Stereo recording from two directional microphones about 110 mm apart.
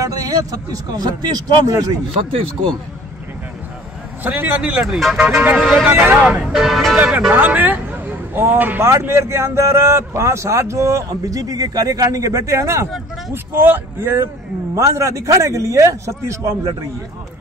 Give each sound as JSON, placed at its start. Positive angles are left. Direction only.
{"t": 0.0, "sound": "speech", "side_deg": -35}
{"t": 4.2, "sound": "speech", "side_deg": -15}
{"t": 4.8, "sound": "speech", "side_deg": -5}
{"t": 5.2, "sound": "speech", "side_deg": -15}
{"t": 5.6, "sound": "speech", "side_deg": 0}
{"t": 5.9, "sound": "speech", "side_deg": -15}